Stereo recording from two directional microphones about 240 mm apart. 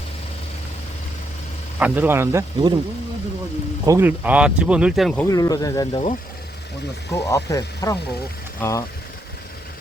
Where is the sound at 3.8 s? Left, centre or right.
Centre.